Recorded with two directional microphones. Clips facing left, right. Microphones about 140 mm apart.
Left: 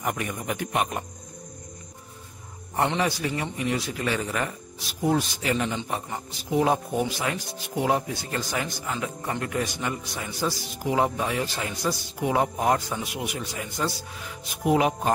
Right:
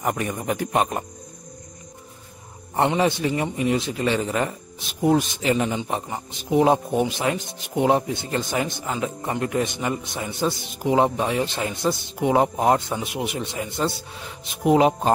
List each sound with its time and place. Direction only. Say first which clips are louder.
0.0 s speech: right 4 dB; 35° right (ahead or behind)
3.0 s speech: right 5 dB; 25° right (ahead or behind)